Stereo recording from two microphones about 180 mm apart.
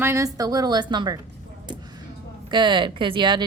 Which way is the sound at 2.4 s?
25° right (ahead or behind).